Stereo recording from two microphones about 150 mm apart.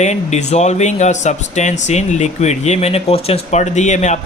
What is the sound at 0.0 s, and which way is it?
Speech, 50° left (ahead or behind).